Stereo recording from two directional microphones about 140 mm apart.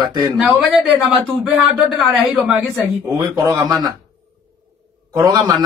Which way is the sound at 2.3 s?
10° right (ahead or behind).